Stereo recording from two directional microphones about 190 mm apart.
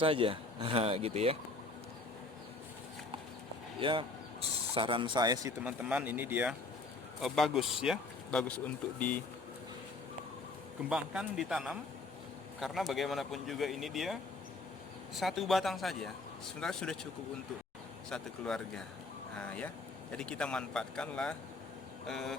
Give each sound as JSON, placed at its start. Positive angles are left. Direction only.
{"t": 0.0, "sound": "speech", "side_deg": -30}
{"t": 3.8, "sound": "speech", "side_deg": -25}
{"t": 5.8, "sound": "speech", "side_deg": -5}
{"t": 10.8, "sound": "speech", "side_deg": -5}
{"t": 15.2, "sound": "speech", "side_deg": 0}
{"t": 18.1, "sound": "speech", "side_deg": 5}